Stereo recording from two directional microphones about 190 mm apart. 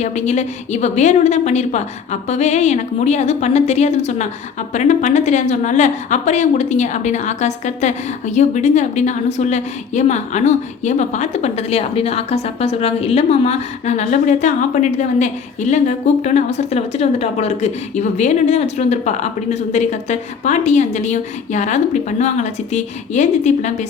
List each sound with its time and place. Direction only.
0.0 s a woman's voice: 35° left (ahead or behind)